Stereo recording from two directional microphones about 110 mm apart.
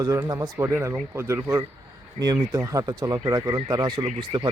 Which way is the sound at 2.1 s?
40° right (ahead or behind).